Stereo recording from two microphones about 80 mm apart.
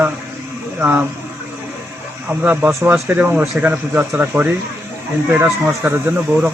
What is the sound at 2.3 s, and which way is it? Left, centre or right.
Speech, centre.